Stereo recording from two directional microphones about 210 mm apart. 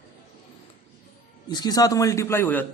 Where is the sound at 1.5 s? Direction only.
20° left (ahead or behind).